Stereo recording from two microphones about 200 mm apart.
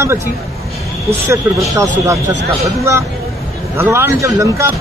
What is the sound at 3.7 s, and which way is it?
Speech, 10° right (ahead or behind).